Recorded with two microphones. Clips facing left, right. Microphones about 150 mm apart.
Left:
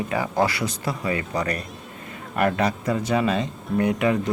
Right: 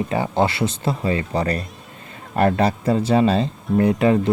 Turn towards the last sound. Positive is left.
turn(degrees=-30)  # may be behind; listen again after turning